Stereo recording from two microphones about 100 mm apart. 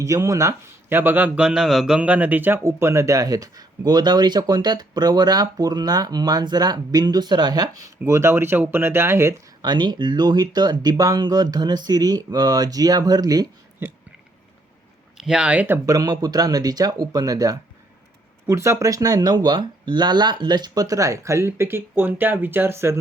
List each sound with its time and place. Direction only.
0.0 s speech: 30° right (ahead or behind)
9.6 s speech: 45° right (ahead or behind)
15.2 s speech: 10° right (ahead or behind)
15.9 s speech: 35° right (ahead or behind)